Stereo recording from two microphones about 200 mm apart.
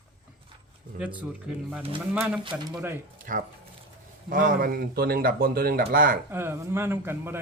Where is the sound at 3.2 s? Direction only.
40° right (ahead or behind).